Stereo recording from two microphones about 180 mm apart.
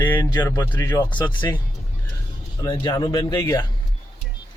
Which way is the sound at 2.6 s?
25° left (ahead or behind).